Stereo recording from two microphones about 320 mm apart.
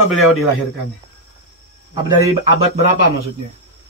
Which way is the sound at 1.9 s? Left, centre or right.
Centre.